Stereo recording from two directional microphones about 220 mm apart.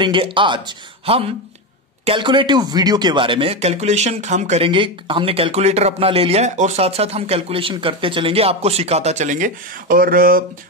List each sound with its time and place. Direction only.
0.0 s speech: 20° right (ahead or behind); by 10.4 s 40° right (ahead or behind)